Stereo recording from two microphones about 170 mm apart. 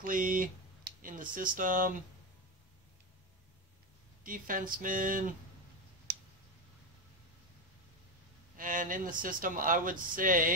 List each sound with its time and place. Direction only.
0.0 s speech: 55° right (ahead or behind)
4.2 s speech: 55° right (ahead or behind)
8.5 s speech: 50° right (ahead or behind)